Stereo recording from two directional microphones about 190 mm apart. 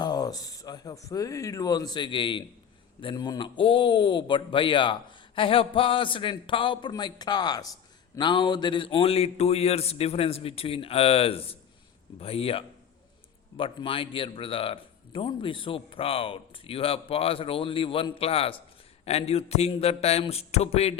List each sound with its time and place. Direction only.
0.0 s a man's voice: 20° left (ahead or behind)